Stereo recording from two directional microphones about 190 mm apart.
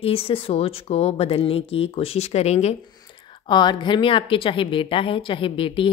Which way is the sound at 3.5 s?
25° left (ahead or behind).